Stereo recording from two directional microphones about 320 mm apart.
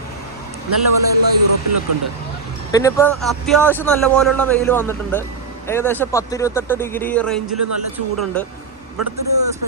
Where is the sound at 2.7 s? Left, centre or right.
Centre.